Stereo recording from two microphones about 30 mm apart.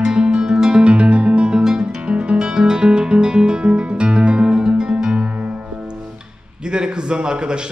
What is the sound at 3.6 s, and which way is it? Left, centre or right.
Music, right.